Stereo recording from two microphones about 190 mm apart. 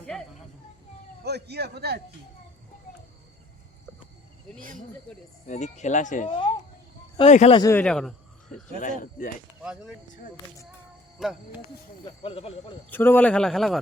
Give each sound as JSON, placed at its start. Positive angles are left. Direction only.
{"t": 0.0, "sound": "a sound", "side_deg": 5}
{"t": 1.2, "sound": "a man's voice", "side_deg": -60}
{"t": 4.5, "sound": "speech", "side_deg": 0}
{"t": 5.5, "sound": "speech", "side_deg": 40}
{"t": 7.5, "sound": "speech", "side_deg": 15}
{"t": 8.8, "sound": "speech", "side_deg": 45}
{"t": 11.2, "sound": "speech", "side_deg": 0}
{"t": 12.2, "sound": "speech", "side_deg": 30}
{"t": 12.9, "sound": "speech", "side_deg": 10}